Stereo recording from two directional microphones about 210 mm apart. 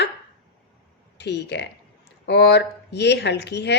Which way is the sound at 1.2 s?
55° left (ahead or behind).